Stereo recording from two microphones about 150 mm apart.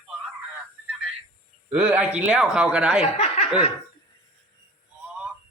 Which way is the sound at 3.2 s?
45° left (ahead or behind).